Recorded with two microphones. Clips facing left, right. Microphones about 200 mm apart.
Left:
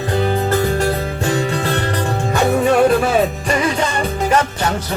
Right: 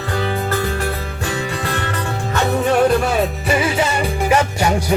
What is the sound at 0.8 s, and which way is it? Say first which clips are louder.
Music: left 5 dB; 35° left (ahead or behind).